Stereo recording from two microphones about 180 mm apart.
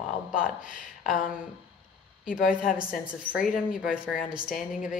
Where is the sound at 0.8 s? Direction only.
45° left (ahead or behind).